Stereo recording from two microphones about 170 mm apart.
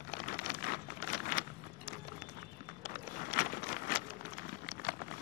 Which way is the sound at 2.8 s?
65° left (ahead or behind).